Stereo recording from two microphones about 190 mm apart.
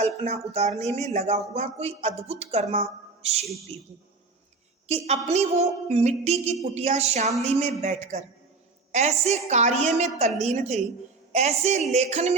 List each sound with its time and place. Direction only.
0.0 s speech: 35° right (ahead or behind)
4.9 s speech: 35° right (ahead or behind)